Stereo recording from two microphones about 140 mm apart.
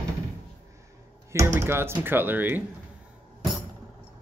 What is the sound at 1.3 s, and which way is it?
Speech, 20° right (ahead or behind).